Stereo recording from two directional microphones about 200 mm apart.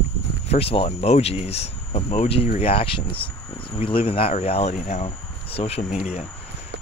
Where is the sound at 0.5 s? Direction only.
30° left (ahead or behind).